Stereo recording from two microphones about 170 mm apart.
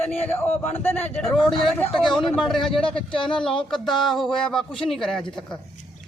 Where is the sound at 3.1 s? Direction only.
30° left (ahead or behind).